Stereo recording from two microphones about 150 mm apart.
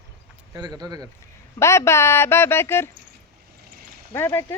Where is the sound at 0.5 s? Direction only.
25° right (ahead or behind).